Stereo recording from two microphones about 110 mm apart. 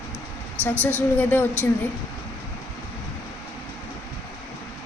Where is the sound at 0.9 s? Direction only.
15° left (ahead or behind).